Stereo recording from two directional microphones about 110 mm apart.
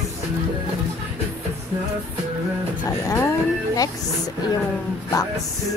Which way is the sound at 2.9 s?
30° left (ahead or behind).